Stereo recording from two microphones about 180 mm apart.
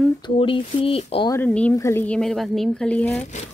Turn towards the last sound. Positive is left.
turn(degrees=5)  # may be behind; listen again after turning